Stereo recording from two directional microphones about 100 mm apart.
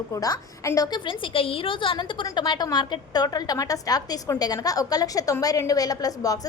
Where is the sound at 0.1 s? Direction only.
35° left (ahead or behind).